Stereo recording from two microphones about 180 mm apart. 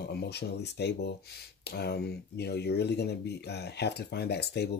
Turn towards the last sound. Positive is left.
turn(degrees=65)  # may be behind; listen again after turning